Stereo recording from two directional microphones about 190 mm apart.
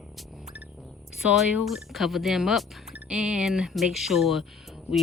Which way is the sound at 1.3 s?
Centre (ahead or behind).